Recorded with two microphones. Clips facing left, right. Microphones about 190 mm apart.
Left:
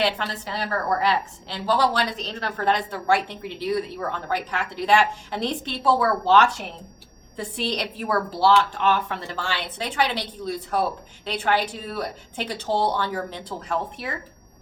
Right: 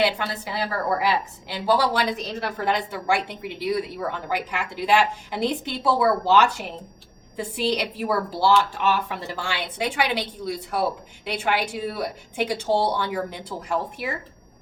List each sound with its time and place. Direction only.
0.0 s a woman's voice: 10° right (ahead or behind)